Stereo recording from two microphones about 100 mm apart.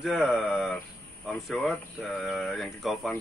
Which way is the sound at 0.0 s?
5° right (ahead or behind).